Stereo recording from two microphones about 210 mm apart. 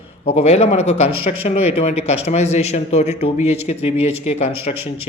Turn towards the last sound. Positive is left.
turn(degrees=30)  # may be behind; listen again after turning